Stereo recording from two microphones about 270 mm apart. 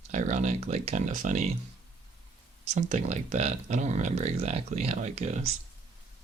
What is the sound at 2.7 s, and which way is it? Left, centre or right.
Speech, right.